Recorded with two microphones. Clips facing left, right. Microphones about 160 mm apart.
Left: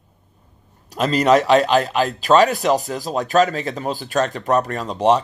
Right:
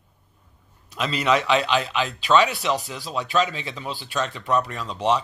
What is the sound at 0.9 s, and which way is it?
Speech, 40° left (ahead or behind).